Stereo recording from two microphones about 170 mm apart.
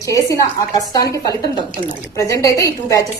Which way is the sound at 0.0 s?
20° left (ahead or behind).